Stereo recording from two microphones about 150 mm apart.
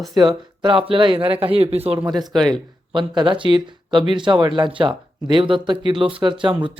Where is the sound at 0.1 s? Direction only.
30° right (ahead or behind).